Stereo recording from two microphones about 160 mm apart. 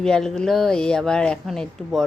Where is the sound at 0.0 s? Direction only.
5° left (ahead or behind).